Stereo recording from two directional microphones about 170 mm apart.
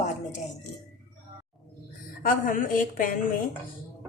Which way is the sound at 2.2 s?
55° left (ahead or behind).